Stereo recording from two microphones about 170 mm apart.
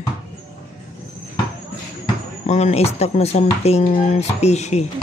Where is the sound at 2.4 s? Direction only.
40° left (ahead or behind).